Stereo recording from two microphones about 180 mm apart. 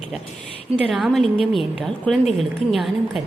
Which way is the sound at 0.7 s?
Centre (ahead or behind).